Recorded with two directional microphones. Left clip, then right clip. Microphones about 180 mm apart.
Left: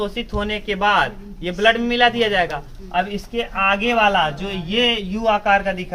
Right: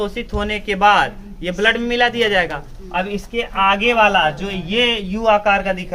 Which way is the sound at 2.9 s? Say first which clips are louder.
Even; 15° right (ahead or behind).